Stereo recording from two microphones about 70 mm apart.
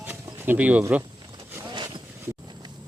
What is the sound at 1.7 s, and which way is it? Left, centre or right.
Zipper, right.